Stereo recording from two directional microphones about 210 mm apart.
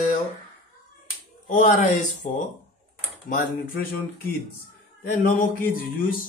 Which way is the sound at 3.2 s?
40° left (ahead or behind).